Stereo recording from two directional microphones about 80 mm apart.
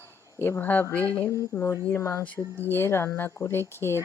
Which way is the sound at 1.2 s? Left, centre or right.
Left.